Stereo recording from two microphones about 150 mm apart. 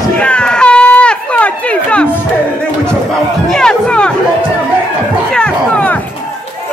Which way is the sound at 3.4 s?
5° left (ahead or behind).